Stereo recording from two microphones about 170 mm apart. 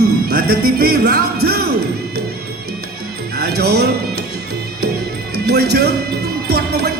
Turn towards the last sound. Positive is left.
turn(degrees=-70)  # may be behind; listen again after turning